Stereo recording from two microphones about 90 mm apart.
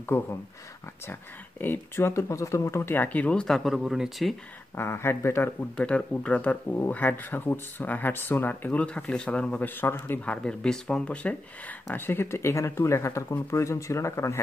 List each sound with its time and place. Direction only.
0.1 s speech: 20° left (ahead or behind)
1.6 s speech: 25° left (ahead or behind)
3.5 s speech: centre (ahead or behind)
4.7 s speech: 25° left (ahead or behind)
5.8 s speech: 15° left (ahead or behind)
11.9 s speech: 25° left (ahead or behind)